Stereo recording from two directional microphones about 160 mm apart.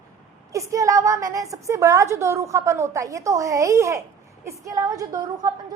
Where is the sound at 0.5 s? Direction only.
20° right (ahead or behind).